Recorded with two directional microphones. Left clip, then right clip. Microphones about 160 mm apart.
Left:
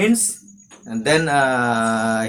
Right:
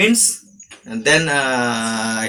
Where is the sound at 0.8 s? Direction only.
40° left (ahead or behind).